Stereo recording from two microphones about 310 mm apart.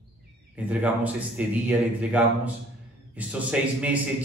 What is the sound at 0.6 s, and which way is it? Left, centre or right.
Speech, centre.